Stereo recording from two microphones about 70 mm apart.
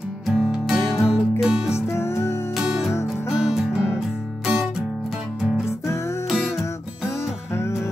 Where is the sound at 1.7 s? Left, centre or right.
Left.